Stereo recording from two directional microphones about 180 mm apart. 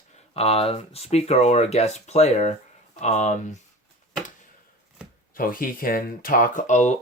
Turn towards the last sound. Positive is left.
turn(degrees=40)  # may be behind; listen again after turning